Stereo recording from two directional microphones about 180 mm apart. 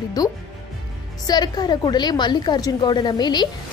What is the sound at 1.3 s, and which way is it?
A woman's voice, 25° left (ahead or behind).